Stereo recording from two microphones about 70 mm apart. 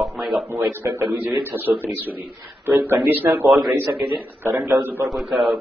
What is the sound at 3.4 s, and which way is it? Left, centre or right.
Speech, centre.